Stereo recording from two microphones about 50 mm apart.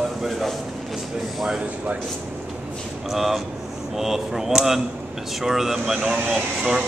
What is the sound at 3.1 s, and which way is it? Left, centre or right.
Speech, centre.